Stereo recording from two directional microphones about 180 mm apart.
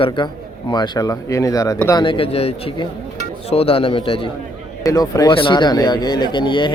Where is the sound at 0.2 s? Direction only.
25° left (ahead or behind).